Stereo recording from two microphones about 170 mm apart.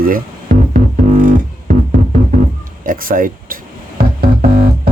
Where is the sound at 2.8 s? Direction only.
55° right (ahead or behind).